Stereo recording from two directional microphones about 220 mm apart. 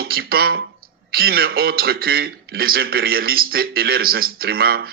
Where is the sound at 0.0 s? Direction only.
45° right (ahead or behind).